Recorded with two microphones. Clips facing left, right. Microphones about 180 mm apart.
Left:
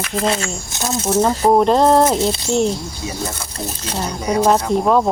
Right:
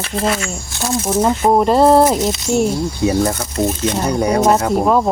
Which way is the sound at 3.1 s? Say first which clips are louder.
Right 10 dB; 55° right (ahead or behind).